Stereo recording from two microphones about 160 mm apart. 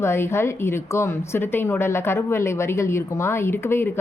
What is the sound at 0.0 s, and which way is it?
Speech, 15° left (ahead or behind).